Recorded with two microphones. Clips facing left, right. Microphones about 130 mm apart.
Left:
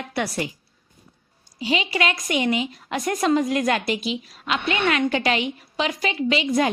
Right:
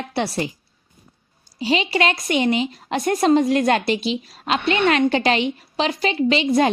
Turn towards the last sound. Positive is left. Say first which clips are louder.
# right 4 dB
turn(degrees=-30)  # may be behind; listen again after turning